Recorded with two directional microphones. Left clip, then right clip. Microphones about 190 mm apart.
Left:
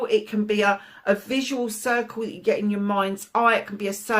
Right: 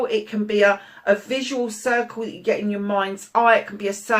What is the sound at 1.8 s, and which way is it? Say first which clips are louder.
Speech: right 2 dB; 50° left (ahead or behind).